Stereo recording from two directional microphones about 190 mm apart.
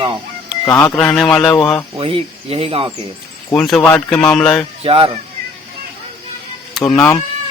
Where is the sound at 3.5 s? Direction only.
5° left (ahead or behind).